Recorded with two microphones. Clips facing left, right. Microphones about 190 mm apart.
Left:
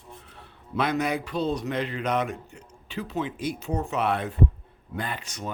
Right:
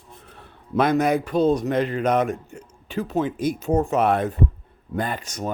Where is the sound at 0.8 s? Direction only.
45° right (ahead or behind).